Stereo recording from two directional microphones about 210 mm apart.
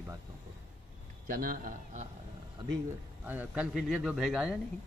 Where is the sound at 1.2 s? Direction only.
40° right (ahead or behind).